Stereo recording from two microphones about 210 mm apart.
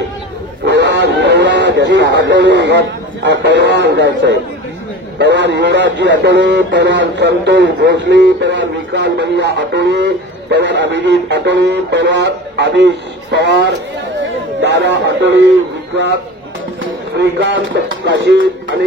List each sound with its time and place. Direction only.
0.7 s a man's voice: 55° right (ahead or behind)
16.8 s speech: 60° right (ahead or behind)